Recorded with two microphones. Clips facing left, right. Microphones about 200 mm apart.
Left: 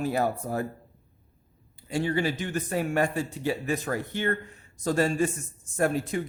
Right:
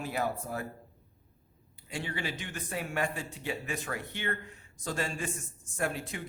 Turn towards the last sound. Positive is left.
turn(degrees=40)  # may be behind; listen again after turning